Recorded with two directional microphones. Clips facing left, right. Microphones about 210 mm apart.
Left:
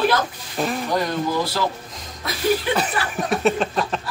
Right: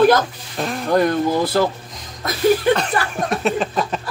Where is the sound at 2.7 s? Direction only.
5° left (ahead or behind).